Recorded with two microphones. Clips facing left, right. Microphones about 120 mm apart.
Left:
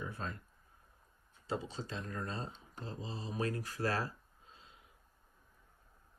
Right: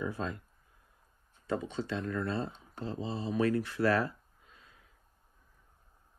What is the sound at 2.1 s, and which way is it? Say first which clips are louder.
Speech: right 7 dB; 40° right (ahead or behind).